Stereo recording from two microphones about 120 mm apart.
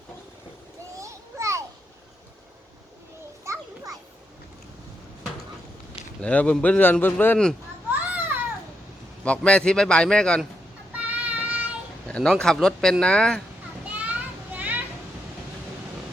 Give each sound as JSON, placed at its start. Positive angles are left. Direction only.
{"t": 0.9, "sound": "children playing", "side_deg": -25}
{"t": 3.4, "sound": "children playing", "side_deg": -25}
{"t": 6.2, "sound": "speech", "side_deg": 10}
{"t": 7.9, "sound": "a sound", "side_deg": -15}
{"t": 9.2, "sound": "speech", "side_deg": 10}
{"t": 10.9, "sound": "child singing", "side_deg": -10}
{"t": 12.0, "sound": "speech", "side_deg": 5}
{"t": 13.8, "sound": "children playing", "side_deg": -10}